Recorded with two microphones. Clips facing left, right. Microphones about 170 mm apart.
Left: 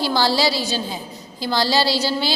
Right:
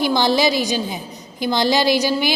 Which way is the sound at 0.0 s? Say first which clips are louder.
Right 2 dB; 20° right (ahead or behind).